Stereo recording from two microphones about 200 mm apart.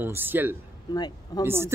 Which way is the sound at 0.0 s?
10° right (ahead or behind).